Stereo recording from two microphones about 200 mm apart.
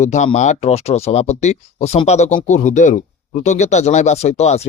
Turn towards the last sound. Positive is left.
turn(degrees=35)  # may be behind; listen again after turning